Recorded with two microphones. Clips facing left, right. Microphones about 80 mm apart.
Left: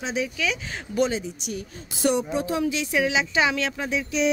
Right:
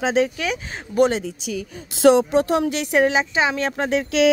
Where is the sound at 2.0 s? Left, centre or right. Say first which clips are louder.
Right 9 dB; right.